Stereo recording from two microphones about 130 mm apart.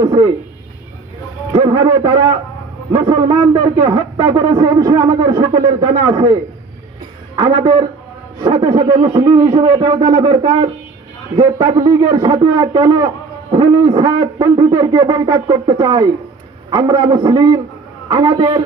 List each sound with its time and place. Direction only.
0.0 s speech: 35° right (ahead or behind)
1.7 s speech: 35° right (ahead or behind)
7.4 s speech: 35° right (ahead or behind)
9.6 s speech: 30° right (ahead or behind)